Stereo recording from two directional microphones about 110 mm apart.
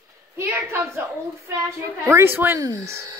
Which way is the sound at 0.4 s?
20° right (ahead or behind).